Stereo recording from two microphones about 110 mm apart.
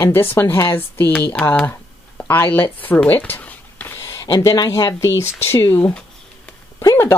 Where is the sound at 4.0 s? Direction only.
25° left (ahead or behind).